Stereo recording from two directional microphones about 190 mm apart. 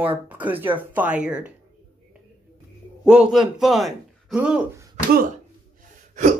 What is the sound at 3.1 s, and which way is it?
A man's voice, 5° right (ahead or behind).